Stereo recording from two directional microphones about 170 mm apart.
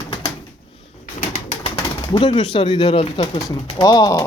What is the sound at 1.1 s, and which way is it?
Bird, 40° left (ahead or behind).